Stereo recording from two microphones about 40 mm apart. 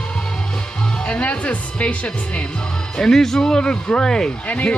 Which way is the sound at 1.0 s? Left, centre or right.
Left.